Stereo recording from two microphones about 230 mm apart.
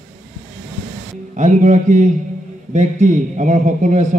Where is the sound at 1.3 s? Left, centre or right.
Right.